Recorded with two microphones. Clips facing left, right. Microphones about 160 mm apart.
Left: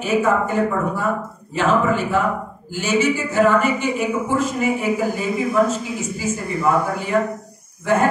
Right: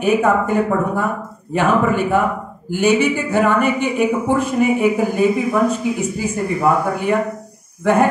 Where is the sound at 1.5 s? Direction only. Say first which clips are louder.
Right 2 dB; 55° right (ahead or behind).